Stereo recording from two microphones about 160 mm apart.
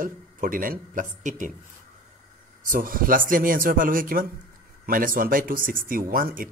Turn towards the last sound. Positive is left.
turn(degrees=-60)  # may be behind; listen again after turning